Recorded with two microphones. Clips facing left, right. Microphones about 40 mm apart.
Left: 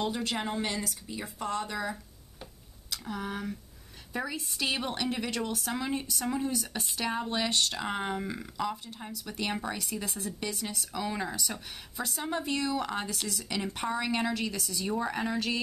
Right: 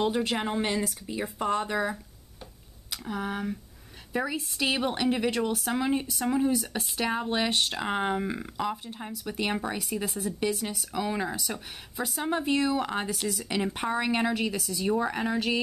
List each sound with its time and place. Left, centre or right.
0.0 s a woman's voice: centre
3.0 s speech: centre